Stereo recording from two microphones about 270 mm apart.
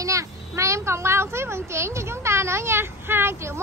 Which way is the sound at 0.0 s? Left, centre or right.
Centre.